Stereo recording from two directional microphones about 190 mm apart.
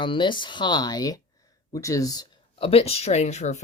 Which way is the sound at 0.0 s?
25° left (ahead or behind).